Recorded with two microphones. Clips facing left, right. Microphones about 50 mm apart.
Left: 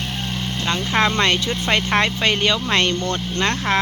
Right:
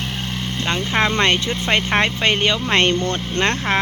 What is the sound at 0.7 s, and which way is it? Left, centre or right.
Speech, centre.